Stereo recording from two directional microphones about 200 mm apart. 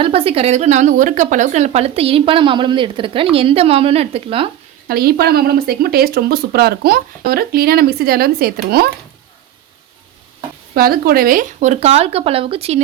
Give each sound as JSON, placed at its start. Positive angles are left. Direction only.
{"t": 0.0, "sound": "a woman's voice", "side_deg": -30}
{"t": 4.9, "sound": "speech", "side_deg": -50}
{"t": 10.8, "sound": "speech", "side_deg": -50}